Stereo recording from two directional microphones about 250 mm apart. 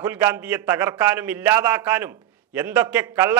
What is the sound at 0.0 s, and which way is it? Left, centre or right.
A man's voice, centre.